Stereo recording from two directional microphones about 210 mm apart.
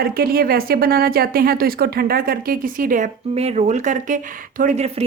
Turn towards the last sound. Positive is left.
turn(degrees=-30)  # may be behind; listen again after turning